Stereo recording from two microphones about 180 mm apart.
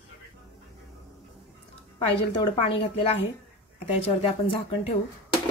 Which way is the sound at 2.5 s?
30° left (ahead or behind).